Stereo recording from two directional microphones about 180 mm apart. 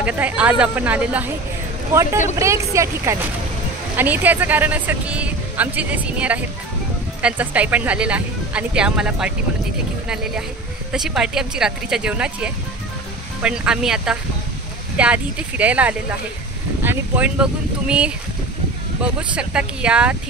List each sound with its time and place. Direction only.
0.0 s speech: 10° right (ahead or behind)
2.3 s speech: 15° right (ahead or behind)